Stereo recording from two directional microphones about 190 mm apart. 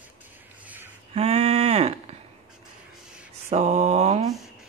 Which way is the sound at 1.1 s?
35° right (ahead or behind).